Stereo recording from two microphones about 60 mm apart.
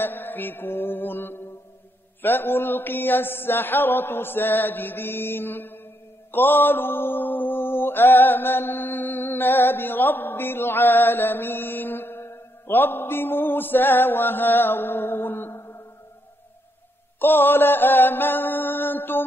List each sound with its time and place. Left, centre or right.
0.0 s music: left
2.2 s mantra: left
17.2 s mantra: left